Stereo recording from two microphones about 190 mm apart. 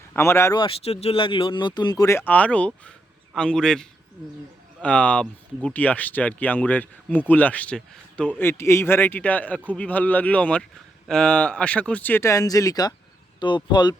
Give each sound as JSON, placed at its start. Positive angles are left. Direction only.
{"t": 0.1, "sound": "speech", "side_deg": 15}
{"t": 0.6, "sound": "a man's voice", "side_deg": 30}